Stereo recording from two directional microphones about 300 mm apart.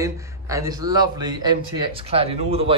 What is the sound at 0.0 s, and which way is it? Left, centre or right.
A man's voice, centre.